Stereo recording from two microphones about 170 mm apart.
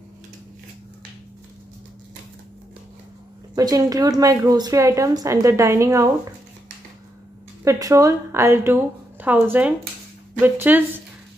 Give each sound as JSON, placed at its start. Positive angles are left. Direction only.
{"t": 3.5, "sound": "speech", "side_deg": -20}
{"t": 7.6, "sound": "a woman's voice", "side_deg": -20}